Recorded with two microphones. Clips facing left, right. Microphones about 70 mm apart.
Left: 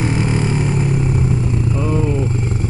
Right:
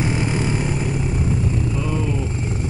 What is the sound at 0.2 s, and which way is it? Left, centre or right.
Vehicle, centre.